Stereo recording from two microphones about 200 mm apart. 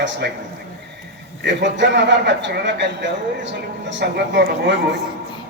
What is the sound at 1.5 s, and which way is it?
A man's voice, 60° right (ahead or behind).